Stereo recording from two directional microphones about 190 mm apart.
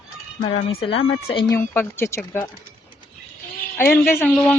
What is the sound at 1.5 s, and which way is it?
Speech, 10° left (ahead or behind).